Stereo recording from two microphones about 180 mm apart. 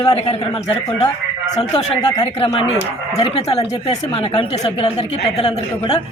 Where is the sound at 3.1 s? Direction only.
35° left (ahead or behind).